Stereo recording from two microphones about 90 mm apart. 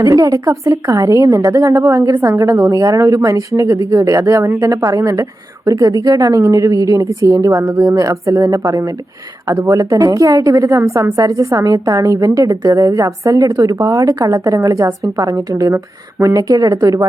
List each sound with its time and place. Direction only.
0.0 s a woman's voice: 40° right (ahead or behind)